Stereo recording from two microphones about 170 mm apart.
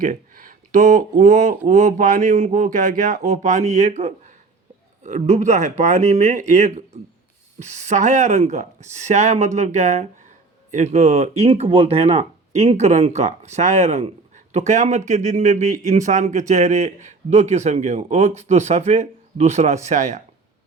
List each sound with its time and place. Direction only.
0.0 s a man's voice: 50° right (ahead or behind)